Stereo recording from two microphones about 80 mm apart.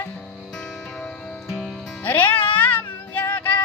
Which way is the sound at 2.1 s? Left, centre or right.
Left.